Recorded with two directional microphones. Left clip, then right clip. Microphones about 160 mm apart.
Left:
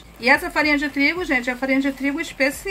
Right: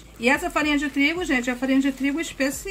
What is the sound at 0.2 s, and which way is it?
Speech, 40° right (ahead or behind).